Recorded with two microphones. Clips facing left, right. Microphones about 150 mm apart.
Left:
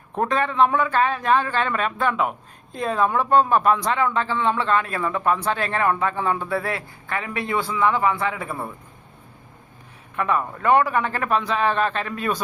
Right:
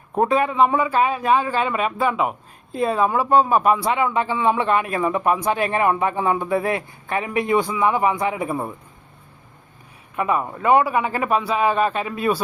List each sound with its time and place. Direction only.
0.1 s speech: 10° right (ahead or behind)
10.2 s speech: 10° right (ahead or behind)